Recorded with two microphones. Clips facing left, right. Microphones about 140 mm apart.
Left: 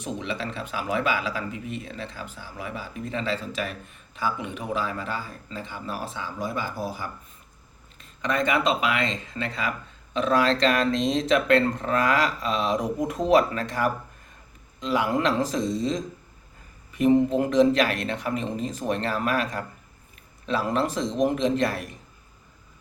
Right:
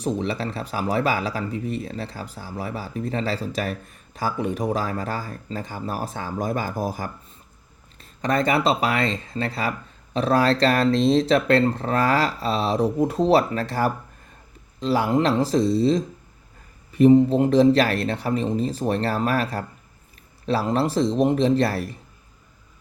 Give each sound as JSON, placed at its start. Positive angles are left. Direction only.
{"t": 0.0, "sound": "speech", "side_deg": -35}
{"t": 8.2, "sound": "speech", "side_deg": -35}
{"t": 17.2, "sound": "speech", "side_deg": -30}